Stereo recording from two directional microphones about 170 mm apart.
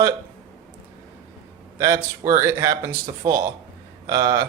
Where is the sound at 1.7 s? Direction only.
20° right (ahead or behind).